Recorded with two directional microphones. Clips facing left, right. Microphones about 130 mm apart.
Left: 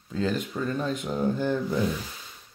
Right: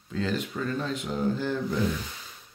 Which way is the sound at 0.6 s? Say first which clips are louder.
Left 2 dB; 15° left (ahead or behind).